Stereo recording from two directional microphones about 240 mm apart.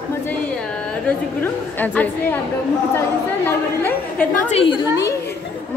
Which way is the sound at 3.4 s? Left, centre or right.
Centre.